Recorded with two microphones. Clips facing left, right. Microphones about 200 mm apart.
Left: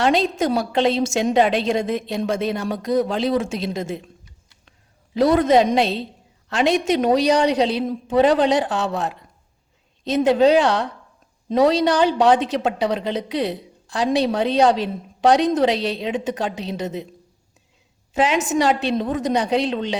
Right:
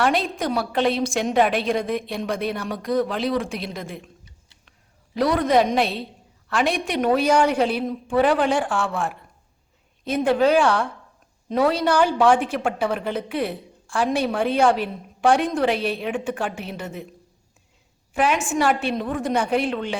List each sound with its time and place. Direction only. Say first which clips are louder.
0.0 s a woman's voice: left 3 dB; 25° left (ahead or behind)
5.1 s a woman's voice: left 4 dB; 25° left (ahead or behind)
18.1 s a woman's voice: left 2 dB; 20° left (ahead or behind)